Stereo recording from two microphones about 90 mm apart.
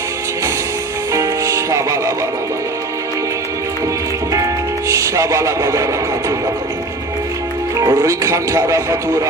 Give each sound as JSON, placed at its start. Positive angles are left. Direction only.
{"t": 1.1, "sound": "music", "side_deg": -35}
{"t": 4.9, "sound": "a sound", "side_deg": -35}
{"t": 7.8, "sound": "speech", "side_deg": -40}